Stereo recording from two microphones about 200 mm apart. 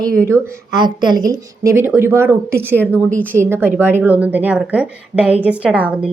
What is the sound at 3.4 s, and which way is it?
Speech, 10° right (ahead or behind).